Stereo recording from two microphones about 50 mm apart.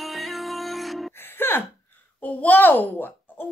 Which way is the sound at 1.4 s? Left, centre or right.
Left.